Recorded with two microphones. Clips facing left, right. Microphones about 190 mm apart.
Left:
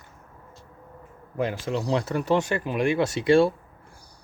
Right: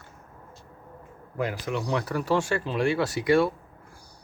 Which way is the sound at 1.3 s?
25° left (ahead or behind).